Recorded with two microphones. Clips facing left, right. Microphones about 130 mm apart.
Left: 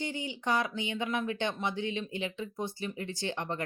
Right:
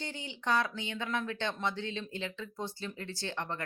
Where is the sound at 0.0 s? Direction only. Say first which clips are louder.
Left 4 dB; 15° left (ahead or behind).